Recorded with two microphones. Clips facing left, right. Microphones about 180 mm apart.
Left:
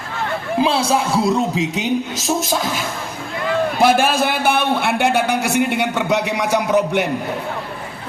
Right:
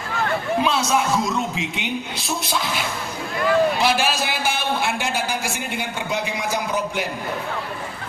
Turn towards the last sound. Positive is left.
turn(degrees=65)  # may be behind; listen again after turning